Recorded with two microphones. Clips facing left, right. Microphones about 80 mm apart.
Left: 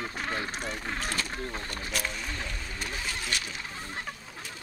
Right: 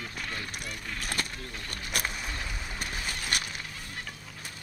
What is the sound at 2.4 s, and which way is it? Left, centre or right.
Boat, centre.